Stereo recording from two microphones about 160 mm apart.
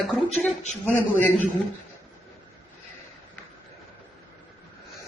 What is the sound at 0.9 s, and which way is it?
Speech, 10° left (ahead or behind).